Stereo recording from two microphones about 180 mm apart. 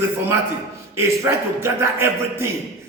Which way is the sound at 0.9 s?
15° right (ahead or behind).